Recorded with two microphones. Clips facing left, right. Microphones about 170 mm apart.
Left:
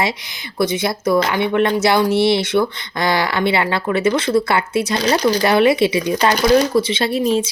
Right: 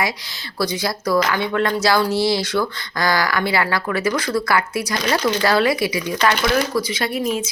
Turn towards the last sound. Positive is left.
turn(degrees=30)  # may be behind; listen again after turning